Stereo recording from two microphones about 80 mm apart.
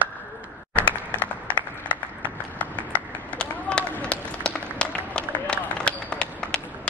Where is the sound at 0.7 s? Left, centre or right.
Left.